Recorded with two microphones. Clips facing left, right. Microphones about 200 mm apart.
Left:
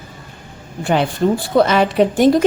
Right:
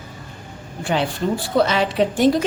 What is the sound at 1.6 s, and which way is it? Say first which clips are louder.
Speech: left 4 dB; 50° left (ahead or behind).